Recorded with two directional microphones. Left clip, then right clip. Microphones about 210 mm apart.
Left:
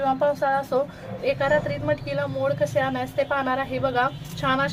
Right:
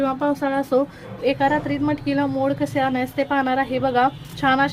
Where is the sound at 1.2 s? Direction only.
30° right (ahead or behind).